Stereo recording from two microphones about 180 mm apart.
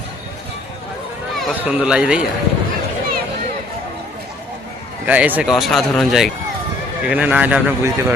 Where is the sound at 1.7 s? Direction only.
5° right (ahead or behind).